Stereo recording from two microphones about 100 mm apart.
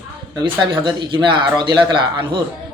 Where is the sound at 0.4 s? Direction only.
50° right (ahead or behind).